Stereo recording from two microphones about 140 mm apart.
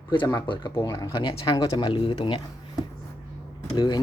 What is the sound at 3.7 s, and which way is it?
Speech, 30° left (ahead or behind).